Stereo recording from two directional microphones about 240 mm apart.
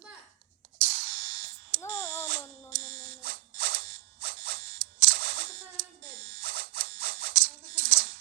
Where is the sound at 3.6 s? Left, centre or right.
Right.